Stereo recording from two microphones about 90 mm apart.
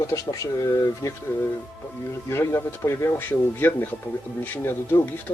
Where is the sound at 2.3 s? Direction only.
30° left (ahead or behind).